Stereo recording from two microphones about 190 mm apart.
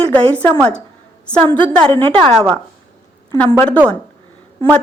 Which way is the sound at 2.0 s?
5° left (ahead or behind).